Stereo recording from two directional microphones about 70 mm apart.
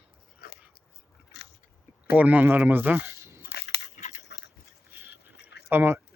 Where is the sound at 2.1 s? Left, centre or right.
Right.